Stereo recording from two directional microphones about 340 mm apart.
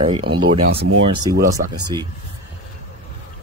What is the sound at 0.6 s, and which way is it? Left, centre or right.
Speech, right.